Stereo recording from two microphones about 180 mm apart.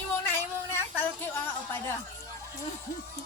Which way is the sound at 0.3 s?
15° left (ahead or behind).